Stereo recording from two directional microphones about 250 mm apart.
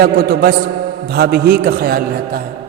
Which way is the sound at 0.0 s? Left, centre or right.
Right.